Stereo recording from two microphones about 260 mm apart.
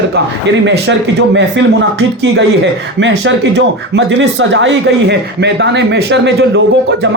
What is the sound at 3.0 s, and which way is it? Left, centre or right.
Speech, right.